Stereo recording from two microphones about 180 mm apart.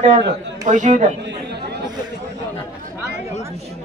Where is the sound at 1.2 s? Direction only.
70° right (ahead or behind).